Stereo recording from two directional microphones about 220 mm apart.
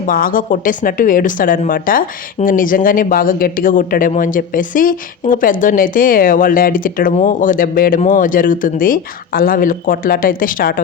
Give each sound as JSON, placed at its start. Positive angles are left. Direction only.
{"t": 0.1, "sound": "speech", "side_deg": 40}